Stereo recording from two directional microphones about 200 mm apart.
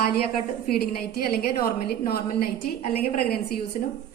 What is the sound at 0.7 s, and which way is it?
A woman's voice, 50° left (ahead or behind).